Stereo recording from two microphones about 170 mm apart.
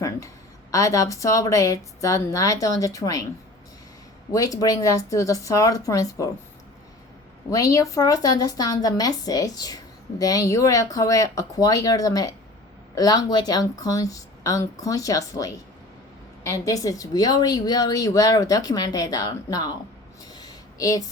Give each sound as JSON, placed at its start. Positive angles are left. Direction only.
{"t": 0.7, "sound": "a woman's voice", "side_deg": 20}
{"t": 4.3, "sound": "a woman's voice", "side_deg": 20}
{"t": 7.5, "sound": "a woman's voice", "side_deg": 20}
{"t": 20.3, "sound": "a sound", "side_deg": 20}